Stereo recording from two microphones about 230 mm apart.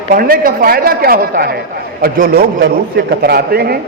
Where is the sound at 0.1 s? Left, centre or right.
Right.